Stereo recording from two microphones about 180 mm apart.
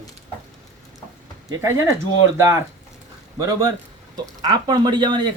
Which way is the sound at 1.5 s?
15° right (ahead or behind).